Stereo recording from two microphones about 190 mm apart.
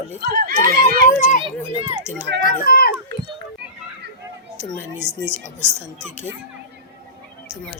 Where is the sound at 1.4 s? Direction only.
30° right (ahead or behind).